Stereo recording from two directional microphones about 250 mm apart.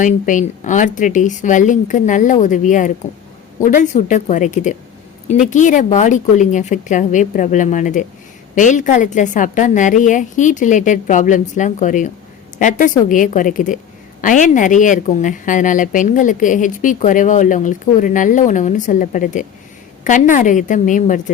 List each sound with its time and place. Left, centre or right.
0.0 s a woman's voice: left